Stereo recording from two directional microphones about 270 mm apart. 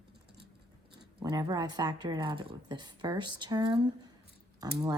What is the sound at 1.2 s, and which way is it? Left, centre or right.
Speech, centre.